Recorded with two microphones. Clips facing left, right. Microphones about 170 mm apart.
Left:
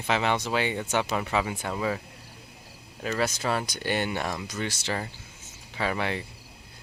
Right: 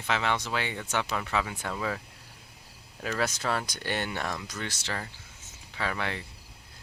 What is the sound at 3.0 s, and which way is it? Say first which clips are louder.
Speech: left 2 dB; centre (ahead or behind).